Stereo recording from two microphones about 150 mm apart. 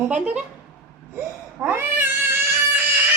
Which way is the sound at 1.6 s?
15° right (ahead or behind).